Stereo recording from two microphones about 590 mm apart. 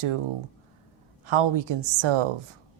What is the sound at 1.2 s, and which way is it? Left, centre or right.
Speech, right.